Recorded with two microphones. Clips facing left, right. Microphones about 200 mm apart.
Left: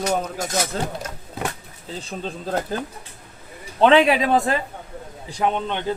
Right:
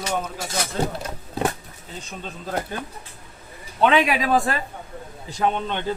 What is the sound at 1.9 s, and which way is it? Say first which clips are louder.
Speech: left 5 dB; 35° left (ahead or behind).